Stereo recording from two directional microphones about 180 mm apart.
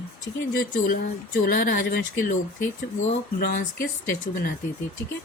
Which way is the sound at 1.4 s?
50° left (ahead or behind).